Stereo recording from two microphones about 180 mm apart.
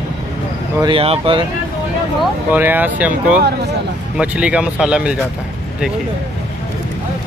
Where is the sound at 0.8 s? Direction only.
30° right (ahead or behind).